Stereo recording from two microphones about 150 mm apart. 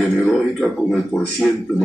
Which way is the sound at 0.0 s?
Centre (ahead or behind).